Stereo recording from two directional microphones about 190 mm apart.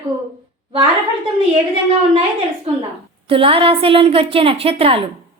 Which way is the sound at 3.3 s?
30° right (ahead or behind).